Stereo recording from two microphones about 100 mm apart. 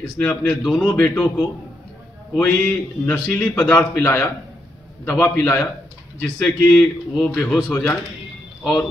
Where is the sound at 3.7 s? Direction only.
25° left (ahead or behind).